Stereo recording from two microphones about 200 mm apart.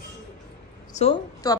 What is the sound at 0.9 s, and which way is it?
Speech, 30° left (ahead or behind).